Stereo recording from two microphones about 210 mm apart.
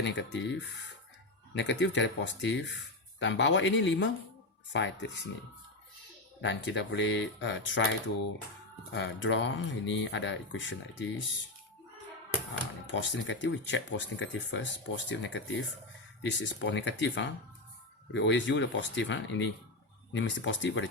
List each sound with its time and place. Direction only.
0.0 s speech: 60° left (ahead or behind)
6.4 s speech: 60° left (ahead or behind)
12.9 s speech: 60° left (ahead or behind)